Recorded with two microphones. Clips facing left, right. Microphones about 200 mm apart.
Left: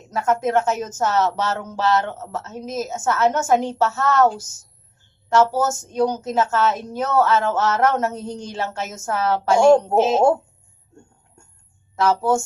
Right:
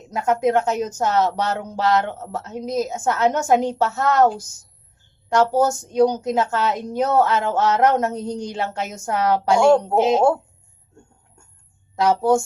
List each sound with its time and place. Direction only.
0.1 s a woman's voice: 15° right (ahead or behind)
11.9 s a woman's voice: 15° right (ahead or behind)